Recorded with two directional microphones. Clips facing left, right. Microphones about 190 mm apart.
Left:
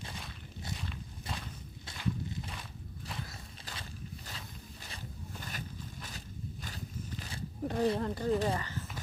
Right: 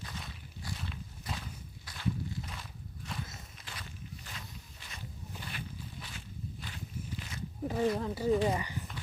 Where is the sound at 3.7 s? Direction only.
40° left (ahead or behind).